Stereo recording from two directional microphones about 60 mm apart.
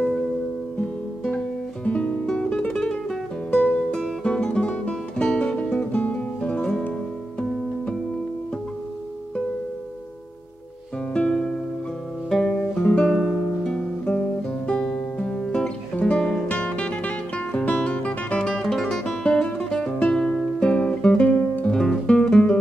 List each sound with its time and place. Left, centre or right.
0.7 s guitar: left
1.9 s music: left
11.1 s music: centre
12.3 s guitar: centre
12.9 s music: centre
13.7 s guitar: centre
14.7 s music: centre
18.4 s music: centre